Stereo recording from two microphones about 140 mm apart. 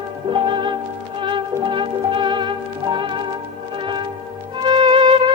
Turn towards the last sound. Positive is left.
turn(degrees=-35)  # may be behind; listen again after turning